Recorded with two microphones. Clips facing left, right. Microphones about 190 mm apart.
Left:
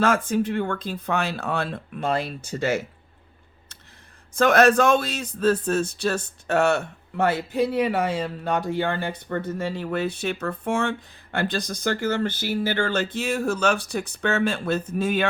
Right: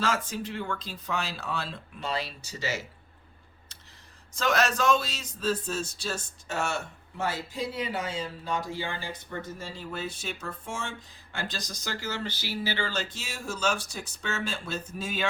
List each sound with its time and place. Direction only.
0.0 s a man's voice: 55° left (ahead or behind)
4.4 s a man's voice: 55° left (ahead or behind)